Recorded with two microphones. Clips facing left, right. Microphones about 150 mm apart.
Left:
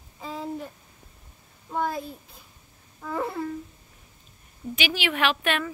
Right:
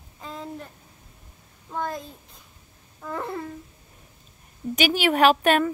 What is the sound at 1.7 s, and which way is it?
Speech, 5° left (ahead or behind).